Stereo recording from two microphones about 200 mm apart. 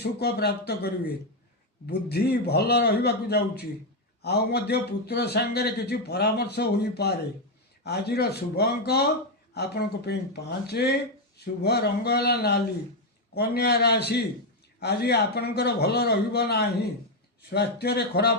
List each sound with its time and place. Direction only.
0.0 s speech: 55° left (ahead or behind)